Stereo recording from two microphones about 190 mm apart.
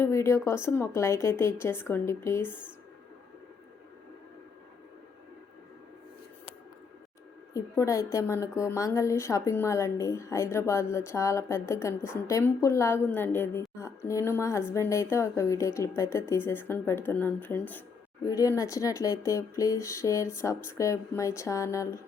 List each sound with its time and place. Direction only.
0.0 s a woman's voice: 15° left (ahead or behind)
7.5 s a woman's voice: 15° left (ahead or behind)